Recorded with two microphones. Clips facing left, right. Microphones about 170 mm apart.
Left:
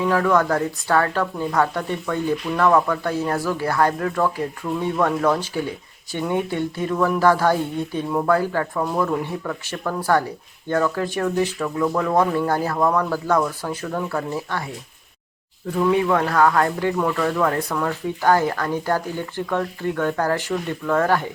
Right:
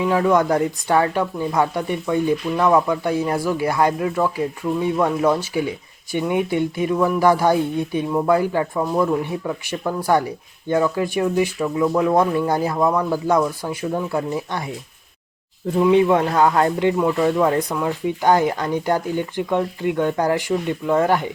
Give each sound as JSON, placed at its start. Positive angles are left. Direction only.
{"t": 0.0, "sound": "speech", "side_deg": -15}
{"t": 15.8, "sound": "speech", "side_deg": -20}